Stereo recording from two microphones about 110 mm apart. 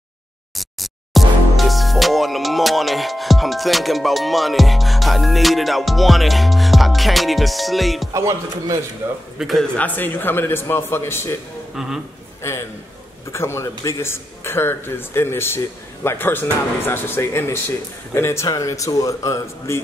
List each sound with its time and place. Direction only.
0.6 s speech: centre (ahead or behind)
8.1 s speech: 30° right (ahead or behind)
9.0 s speech: 20° right (ahead or behind)
9.4 s a man's voice: centre (ahead or behind)
9.8 s speech: 15° left (ahead or behind)
11.7 s a man's voice: 5° right (ahead or behind)
12.4 s a man's voice: 25° left (ahead or behind)